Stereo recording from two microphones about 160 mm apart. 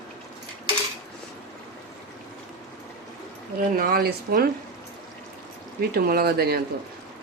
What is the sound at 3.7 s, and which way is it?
Speech, 70° right (ahead or behind).